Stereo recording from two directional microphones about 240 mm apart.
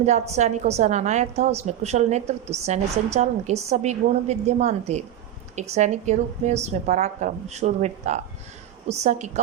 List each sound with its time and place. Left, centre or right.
0.0 s a woman's voice: right